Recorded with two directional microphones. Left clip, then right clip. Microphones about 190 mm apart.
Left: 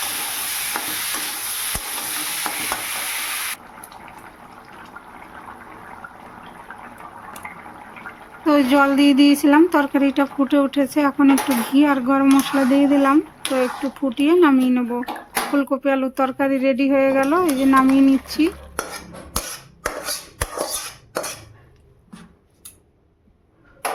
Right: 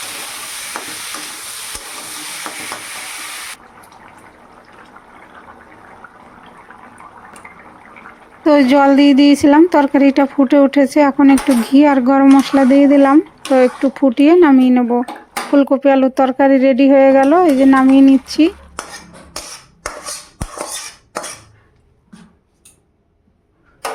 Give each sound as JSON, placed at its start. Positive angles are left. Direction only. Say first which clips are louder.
{"t": 0.7, "sound": "stir", "louder": "right 2 dB", "side_deg": 0}
{"t": 2.5, "sound": "stir", "louder": "left 1 dB", "side_deg": 0}
{"t": 6.7, "sound": "fill", "louder": "left 2 dB", "side_deg": 5}
{"t": 7.4, "sound": "water", "louder": "left 2 dB", "side_deg": 5}
{"t": 8.4, "sound": "speech", "louder": "right 6 dB", "side_deg": -25}